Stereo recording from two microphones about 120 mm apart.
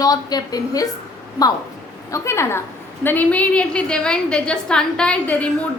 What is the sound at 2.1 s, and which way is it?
A woman's voice, 25° left (ahead or behind).